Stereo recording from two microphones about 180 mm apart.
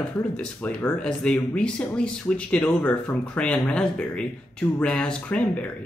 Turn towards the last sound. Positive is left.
turn(degrees=5)  # may be behind; listen again after turning